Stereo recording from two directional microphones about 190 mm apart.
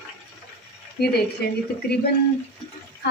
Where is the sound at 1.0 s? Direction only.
55° left (ahead or behind).